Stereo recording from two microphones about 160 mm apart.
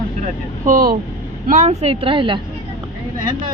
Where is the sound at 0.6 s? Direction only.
60° right (ahead or behind); by 2.3 s 30° right (ahead or behind).